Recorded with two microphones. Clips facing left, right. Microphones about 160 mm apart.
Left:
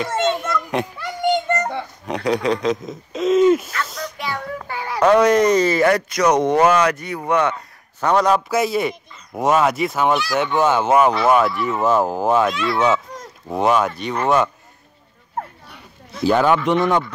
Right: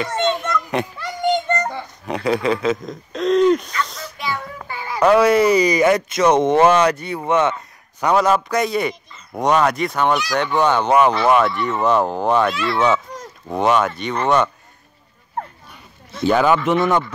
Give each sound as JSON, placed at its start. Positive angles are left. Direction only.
{"t": 0.0, "sound": "children playing", "side_deg": 0}
{"t": 2.0, "sound": "speech", "side_deg": 0}
{"t": 4.6, "sound": "a sound", "side_deg": 70}
{"t": 5.0, "sound": "speech", "side_deg": -5}
{"t": 8.0, "sound": "speech", "side_deg": -5}
{"t": 16.1, "sound": "speech", "side_deg": 0}